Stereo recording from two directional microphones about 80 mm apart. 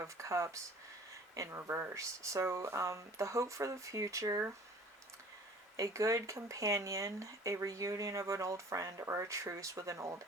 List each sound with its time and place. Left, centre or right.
0.0 s speech: right
5.7 s speech: right